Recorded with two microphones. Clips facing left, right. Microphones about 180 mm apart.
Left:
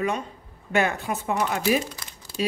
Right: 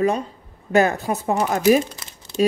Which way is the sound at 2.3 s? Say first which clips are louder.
Right 8 dB; 20° right (ahead or behind).